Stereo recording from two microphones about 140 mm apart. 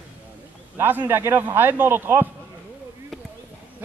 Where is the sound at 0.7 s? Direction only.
15° right (ahead or behind).